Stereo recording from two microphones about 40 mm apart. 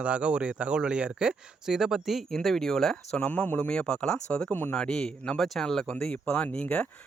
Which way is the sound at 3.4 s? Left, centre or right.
Left.